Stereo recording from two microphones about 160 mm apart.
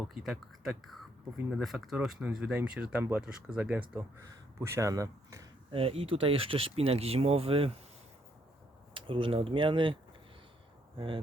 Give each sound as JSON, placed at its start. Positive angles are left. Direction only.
{"t": 0.1, "sound": "speech", "side_deg": 0}
{"t": 5.7, "sound": "speech", "side_deg": -35}
{"t": 9.0, "sound": "speech", "side_deg": -35}
{"t": 10.9, "sound": "speech", "side_deg": -35}